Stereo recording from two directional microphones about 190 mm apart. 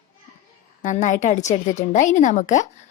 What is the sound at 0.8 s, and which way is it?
Speech, 40° left (ahead or behind).